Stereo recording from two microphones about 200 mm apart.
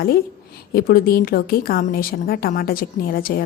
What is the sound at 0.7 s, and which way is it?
A woman's voice, 50° left (ahead or behind).